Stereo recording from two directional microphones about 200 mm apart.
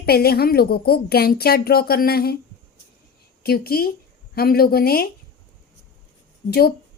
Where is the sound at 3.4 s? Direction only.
50° left (ahead or behind).